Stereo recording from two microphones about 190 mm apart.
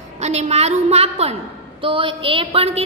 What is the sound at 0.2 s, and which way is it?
A woman's voice, 35° right (ahead or behind).